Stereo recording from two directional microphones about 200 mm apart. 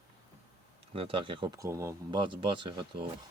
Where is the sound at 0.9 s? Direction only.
25° right (ahead or behind).